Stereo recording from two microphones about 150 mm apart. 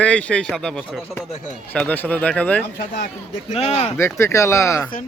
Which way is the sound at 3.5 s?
45° left (ahead or behind).